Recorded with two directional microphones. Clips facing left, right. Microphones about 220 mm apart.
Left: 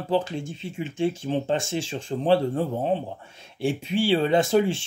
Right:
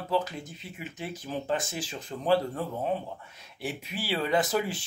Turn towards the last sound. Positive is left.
turn(degrees=25)  # may be behind; listen again after turning